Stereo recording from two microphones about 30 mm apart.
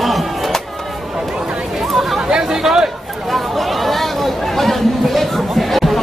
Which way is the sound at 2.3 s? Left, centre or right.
Right.